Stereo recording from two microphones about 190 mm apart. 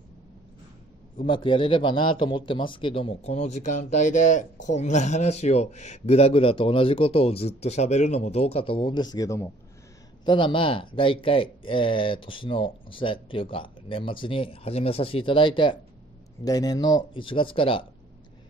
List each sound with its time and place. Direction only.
1.2 s a man's voice: 25° left (ahead or behind)